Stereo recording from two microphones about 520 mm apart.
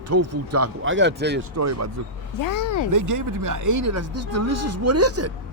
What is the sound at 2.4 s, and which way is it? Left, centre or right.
Speech, left.